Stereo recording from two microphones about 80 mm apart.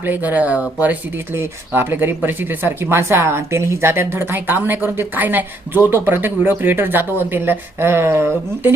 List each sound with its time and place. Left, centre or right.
0.0 s speech: right